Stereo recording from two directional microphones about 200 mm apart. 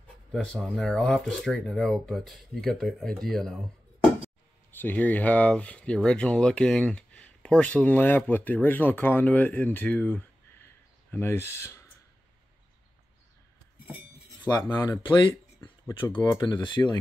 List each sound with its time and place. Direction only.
0.3 s speech: 5° left (ahead or behind)
4.6 s speech: 10° left (ahead or behind)
14.4 s speech: 10° left (ahead or behind)
16.0 s speech: 25° left (ahead or behind)
16.3 s speech: 15° left (ahead or behind)